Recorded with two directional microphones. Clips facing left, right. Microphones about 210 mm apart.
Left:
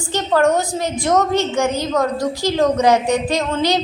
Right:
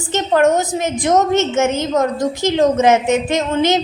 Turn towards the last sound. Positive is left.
turn(degrees=-20)  # may be behind; listen again after turning